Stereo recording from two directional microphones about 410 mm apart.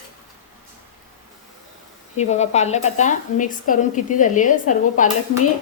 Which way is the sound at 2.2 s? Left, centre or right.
Centre.